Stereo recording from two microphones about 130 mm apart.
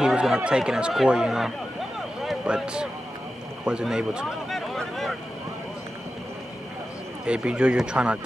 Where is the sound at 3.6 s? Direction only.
5° right (ahead or behind).